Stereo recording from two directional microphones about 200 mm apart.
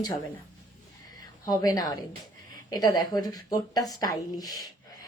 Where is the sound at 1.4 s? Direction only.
20° left (ahead or behind).